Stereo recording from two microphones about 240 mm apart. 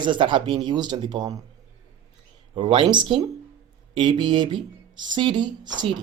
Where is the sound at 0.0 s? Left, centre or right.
Centre.